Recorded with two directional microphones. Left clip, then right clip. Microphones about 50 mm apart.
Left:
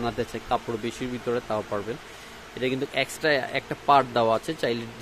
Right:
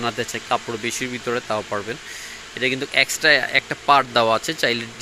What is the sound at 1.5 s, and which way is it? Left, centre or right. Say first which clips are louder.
Speech: right 4 dB; right.